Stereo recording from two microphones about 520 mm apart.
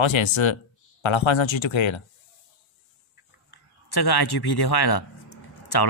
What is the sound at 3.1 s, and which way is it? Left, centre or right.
Speech, left.